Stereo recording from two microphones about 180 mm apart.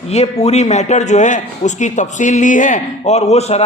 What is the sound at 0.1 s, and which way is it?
A man's voice, 35° left (ahead or behind).